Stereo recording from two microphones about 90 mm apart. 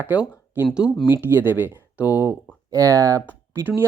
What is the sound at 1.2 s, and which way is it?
Speech, 20° right (ahead or behind).